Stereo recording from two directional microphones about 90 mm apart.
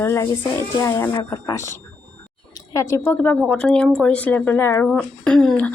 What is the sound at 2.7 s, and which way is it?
Speech, 35° left (ahead or behind).